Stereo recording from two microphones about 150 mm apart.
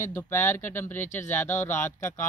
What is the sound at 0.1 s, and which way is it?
Speech, 15° left (ahead or behind).